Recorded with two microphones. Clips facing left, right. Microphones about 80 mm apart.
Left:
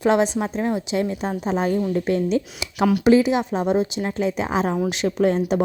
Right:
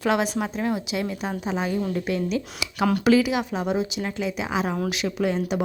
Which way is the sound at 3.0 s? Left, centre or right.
Left.